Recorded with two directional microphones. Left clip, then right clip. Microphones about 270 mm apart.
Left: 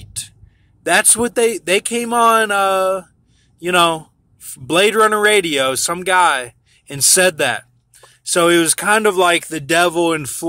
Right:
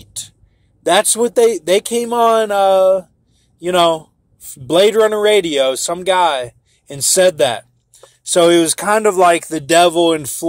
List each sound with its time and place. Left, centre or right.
0.0 s a sound: centre
0.8 s speech: centre
3.7 s speech: centre
4.6 s speech: centre
6.1 s speech: centre
7.3 s speech: centre